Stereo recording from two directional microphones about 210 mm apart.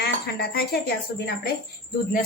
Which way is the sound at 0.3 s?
50° left (ahead or behind).